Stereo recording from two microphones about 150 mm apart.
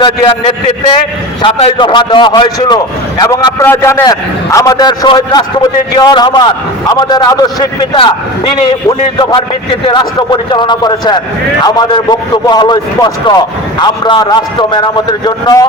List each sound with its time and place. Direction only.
0.0 s a man's voice: 35° left (ahead or behind)
9.8 s a man's voice: 30° left (ahead or behind)